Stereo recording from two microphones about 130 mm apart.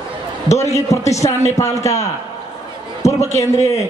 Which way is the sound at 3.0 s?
25° left (ahead or behind).